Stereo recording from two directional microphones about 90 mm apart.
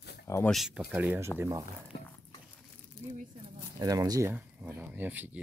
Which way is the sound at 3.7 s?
45° right (ahead or behind).